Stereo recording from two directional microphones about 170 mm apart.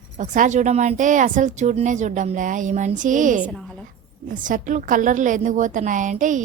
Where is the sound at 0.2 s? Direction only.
45° right (ahead or behind).